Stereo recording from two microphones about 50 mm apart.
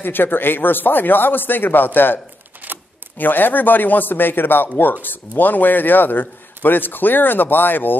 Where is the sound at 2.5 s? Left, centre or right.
Right.